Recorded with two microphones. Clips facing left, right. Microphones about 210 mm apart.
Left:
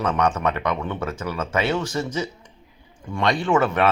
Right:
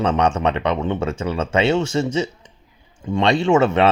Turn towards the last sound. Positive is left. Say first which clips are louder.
# right 4 dB
turn(degrees=-25)  # may be behind; listen again after turning